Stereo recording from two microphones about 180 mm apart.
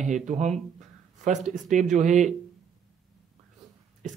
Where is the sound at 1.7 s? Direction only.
40° right (ahead or behind).